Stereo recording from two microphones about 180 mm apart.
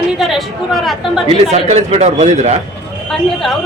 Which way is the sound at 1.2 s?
35° right (ahead or behind).